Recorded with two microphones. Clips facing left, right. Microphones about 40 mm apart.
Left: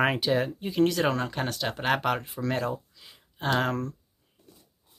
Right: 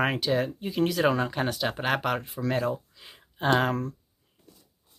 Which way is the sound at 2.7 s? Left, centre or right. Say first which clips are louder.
Even; centre.